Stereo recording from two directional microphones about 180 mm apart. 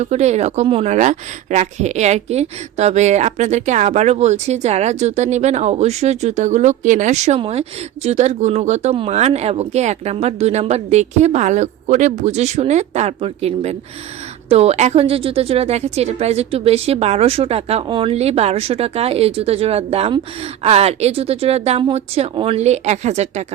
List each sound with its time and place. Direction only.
0.0 s speech: 40° right (ahead or behind)